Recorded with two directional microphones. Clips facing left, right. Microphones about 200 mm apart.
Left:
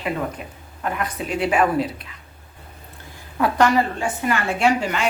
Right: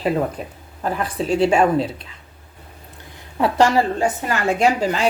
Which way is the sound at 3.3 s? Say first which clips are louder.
Right 2 dB; 25° right (ahead or behind).